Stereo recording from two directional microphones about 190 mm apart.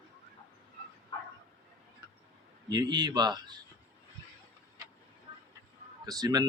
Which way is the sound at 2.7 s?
20° right (ahead or behind).